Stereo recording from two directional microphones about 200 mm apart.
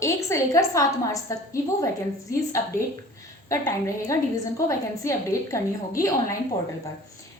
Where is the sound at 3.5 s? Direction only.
15° left (ahead or behind).